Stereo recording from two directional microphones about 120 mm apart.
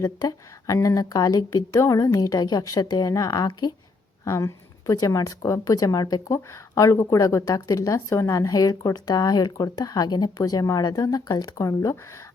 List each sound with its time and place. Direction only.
0.0 s a woman's voice: 30° left (ahead or behind)